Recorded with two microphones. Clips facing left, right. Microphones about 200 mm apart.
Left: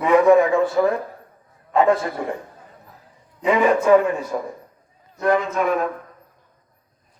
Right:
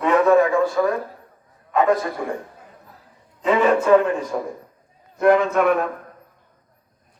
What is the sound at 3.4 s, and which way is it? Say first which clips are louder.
Speech: even; 10° left (ahead or behind).